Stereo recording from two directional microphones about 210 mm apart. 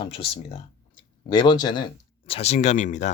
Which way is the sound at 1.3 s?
20° left (ahead or behind).